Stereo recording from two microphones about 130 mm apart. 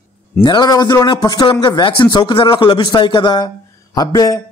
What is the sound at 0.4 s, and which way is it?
A man's voice, 35° left (ahead or behind).